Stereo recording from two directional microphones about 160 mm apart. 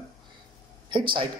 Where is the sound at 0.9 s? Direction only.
30° right (ahead or behind).